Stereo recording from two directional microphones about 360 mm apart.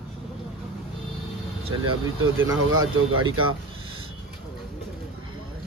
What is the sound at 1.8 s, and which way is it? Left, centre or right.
Speech, right.